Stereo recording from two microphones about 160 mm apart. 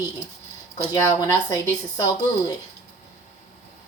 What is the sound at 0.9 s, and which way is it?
A woman's voice, 15° left (ahead or behind).